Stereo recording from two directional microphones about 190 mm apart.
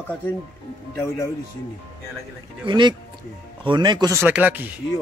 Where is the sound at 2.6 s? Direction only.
25° right (ahead or behind).